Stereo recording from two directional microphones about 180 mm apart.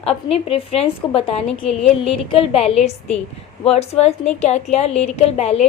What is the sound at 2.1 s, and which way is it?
A woman's voice, 35° left (ahead or behind).